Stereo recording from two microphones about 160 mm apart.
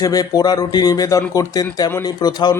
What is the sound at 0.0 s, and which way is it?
Speech, 25° left (ahead or behind).